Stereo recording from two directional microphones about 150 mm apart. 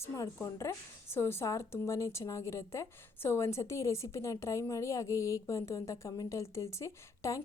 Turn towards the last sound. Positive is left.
turn(degrees=20)  # may be behind; listen again after turning